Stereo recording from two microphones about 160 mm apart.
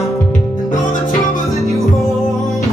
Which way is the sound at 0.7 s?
55° left (ahead or behind).